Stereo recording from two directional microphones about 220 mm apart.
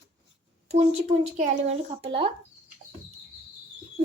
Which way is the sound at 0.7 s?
30° right (ahead or behind).